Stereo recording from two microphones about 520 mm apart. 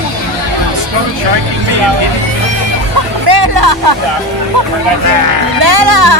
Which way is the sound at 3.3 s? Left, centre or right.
Right.